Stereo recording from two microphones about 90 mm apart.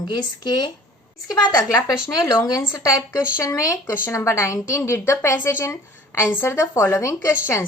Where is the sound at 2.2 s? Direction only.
40° left (ahead or behind).